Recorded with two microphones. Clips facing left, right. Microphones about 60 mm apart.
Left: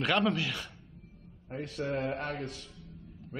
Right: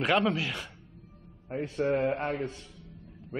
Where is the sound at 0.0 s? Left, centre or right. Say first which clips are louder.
Right 2 dB; centre.